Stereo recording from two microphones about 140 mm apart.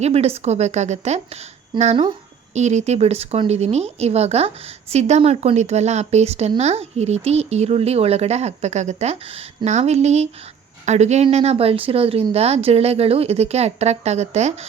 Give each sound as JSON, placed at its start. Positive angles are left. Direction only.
{"t": 0.0, "sound": "speech", "side_deg": -45}
{"t": 1.7, "sound": "speech", "side_deg": -35}
{"t": 2.6, "sound": "speech", "side_deg": -55}